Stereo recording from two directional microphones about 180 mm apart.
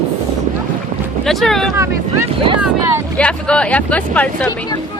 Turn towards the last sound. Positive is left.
turn(degrees=5)  # may be behind; listen again after turning